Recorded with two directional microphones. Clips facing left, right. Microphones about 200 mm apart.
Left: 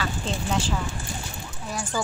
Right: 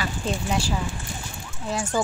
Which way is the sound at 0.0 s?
10° right (ahead or behind).